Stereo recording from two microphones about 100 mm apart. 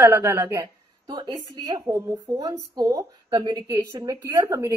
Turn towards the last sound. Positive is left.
turn(degrees=-30)  # may be behind; listen again after turning